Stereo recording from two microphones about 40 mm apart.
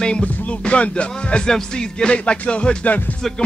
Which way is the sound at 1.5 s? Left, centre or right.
Centre.